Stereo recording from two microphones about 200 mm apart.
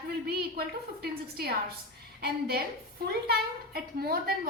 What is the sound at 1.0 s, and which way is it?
Speech, 50° right (ahead or behind).